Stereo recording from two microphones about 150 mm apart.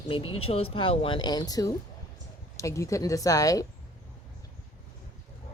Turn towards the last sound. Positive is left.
turn(degrees=20)  # may be behind; listen again after turning